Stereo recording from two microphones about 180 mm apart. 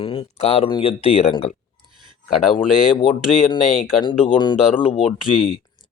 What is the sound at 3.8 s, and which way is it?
A man's voice, 30° left (ahead or behind).